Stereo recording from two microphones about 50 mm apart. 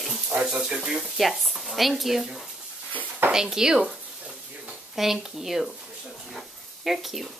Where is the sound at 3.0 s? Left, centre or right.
Right.